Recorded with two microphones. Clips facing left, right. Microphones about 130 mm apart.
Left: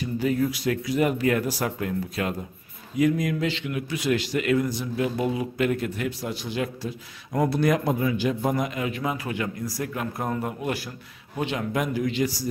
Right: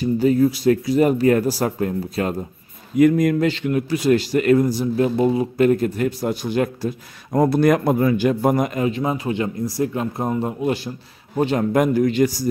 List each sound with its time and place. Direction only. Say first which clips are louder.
0.0 s a man's voice: right 8 dB; 35° right (ahead or behind)
3.0 s a man's voice: right 8 dB; 50° right (ahead or behind)
8.8 s speech: right 7 dB; 30° right (ahead or behind)
11.3 s a man's voice: right 9 dB; 40° right (ahead or behind)